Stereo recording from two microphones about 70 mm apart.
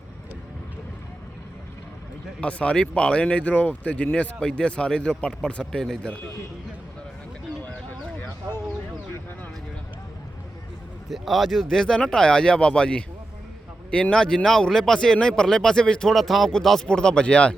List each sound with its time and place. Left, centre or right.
2.4 s speech: centre
7.6 s a sound: left
11.1 s speech: centre